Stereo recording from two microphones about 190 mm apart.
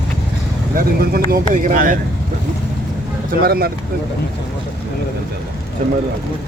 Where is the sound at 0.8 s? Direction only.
50° right (ahead or behind).